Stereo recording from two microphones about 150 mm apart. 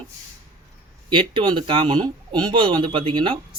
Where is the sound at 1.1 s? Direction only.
30° right (ahead or behind).